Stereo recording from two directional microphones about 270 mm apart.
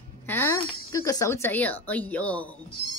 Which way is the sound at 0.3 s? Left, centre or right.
Centre.